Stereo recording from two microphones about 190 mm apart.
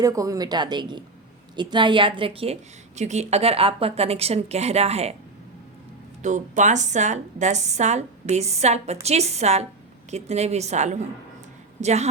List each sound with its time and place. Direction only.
0.0 s a woman's voice: 20° right (ahead or behind); by 5.1 s 35° right (ahead or behind)
6.2 s a woman's voice: 40° right (ahead or behind)